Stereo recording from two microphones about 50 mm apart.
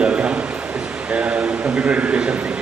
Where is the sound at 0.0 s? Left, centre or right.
Right.